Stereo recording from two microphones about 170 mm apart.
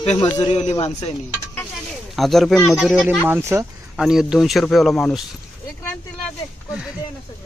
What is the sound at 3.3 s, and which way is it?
Speech, 15° right (ahead or behind).